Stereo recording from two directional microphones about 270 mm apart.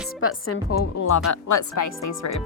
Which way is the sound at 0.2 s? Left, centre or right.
Left.